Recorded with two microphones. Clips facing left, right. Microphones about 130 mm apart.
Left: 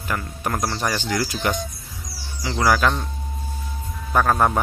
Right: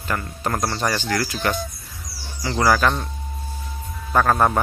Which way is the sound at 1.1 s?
20° left (ahead or behind).